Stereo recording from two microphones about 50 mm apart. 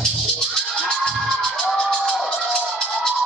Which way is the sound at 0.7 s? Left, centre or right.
Centre.